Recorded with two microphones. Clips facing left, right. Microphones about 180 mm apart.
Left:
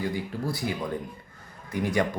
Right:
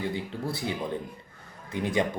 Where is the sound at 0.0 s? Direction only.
25° right (ahead or behind).